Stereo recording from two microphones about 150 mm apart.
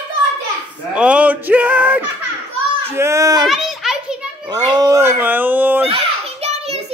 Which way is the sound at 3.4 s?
Centre (ahead or behind).